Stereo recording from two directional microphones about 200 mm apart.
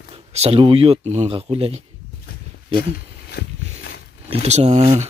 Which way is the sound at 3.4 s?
50° left (ahead or behind).